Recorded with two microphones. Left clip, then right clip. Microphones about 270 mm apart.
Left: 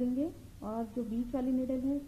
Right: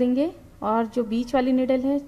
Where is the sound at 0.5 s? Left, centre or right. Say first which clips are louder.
Right 17 dB; right.